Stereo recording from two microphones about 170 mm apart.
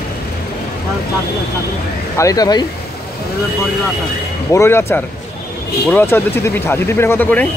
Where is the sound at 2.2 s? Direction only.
20° left (ahead or behind).